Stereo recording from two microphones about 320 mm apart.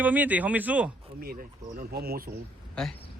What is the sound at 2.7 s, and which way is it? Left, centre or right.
Speech, centre.